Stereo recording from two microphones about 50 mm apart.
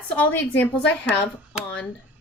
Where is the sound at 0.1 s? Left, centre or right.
Left.